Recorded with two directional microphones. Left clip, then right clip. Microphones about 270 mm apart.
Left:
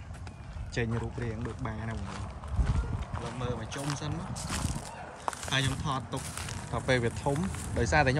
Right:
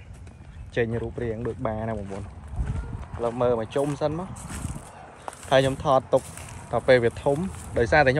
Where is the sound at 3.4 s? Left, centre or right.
Centre.